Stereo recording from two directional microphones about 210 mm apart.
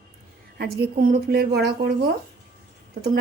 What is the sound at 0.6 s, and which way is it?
A woman's voice, 50° right (ahead or behind).